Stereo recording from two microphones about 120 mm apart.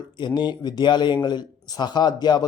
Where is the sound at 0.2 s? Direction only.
40° left (ahead or behind).